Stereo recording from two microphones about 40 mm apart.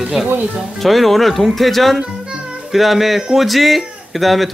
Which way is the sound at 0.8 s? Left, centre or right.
Centre.